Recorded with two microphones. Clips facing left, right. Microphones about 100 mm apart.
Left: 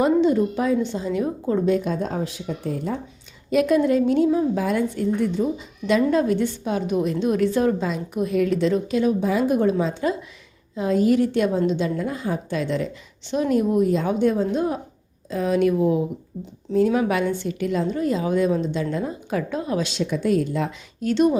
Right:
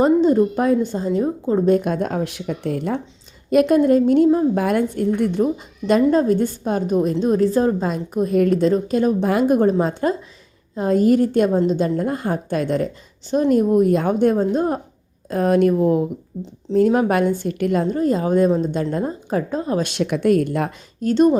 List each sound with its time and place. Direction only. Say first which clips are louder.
0.0 s a woman's voice: right 3 dB; 40° right (ahead or behind)
1.7 s speech: right 4 dB; 55° right (ahead or behind)
3.5 s a woman's voice: right 4 dB; 50° right (ahead or behind)
6.1 s a woman's voice: right 3 dB; 35° right (ahead or behind); by 9.6 s 60° right (ahead or behind)
9.6 s a woman's voice: right 3 dB; 45° right (ahead or behind)
17.9 s a woman's voice: right 4 dB; 40° right (ahead or behind)
19.8 s speech: right 4 dB; 60° right (ahead or behind); by 21.2 s 45° right (ahead or behind)